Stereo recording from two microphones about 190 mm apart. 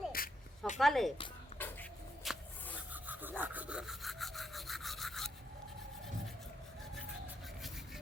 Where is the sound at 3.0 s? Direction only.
10° right (ahead or behind).